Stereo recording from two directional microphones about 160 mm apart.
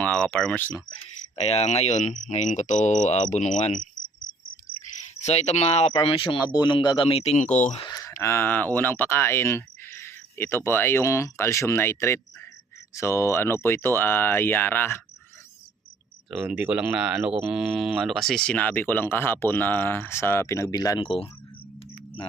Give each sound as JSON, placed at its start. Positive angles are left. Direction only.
{"t": 0.0, "sound": "speech", "side_deg": 10}
{"t": 1.4, "sound": "speech", "side_deg": 40}
{"t": 7.9, "sound": "speech", "side_deg": 20}
{"t": 16.3, "sound": "speech", "side_deg": -10}